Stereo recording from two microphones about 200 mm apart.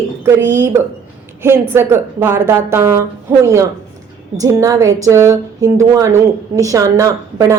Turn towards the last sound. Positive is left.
turn(degrees=-15)  # may be behind; listen again after turning